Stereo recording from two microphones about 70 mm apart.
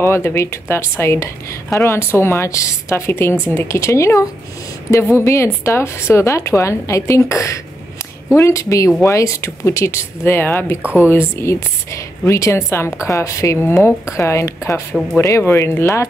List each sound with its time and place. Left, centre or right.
0.0 s a woman's voice: left
11.0 s a woman's voice: left
13.6 s a woman's voice: left